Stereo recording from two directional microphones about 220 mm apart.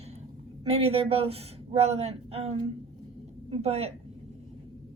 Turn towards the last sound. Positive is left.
turn(degrees=-30)  # may be behind; listen again after turning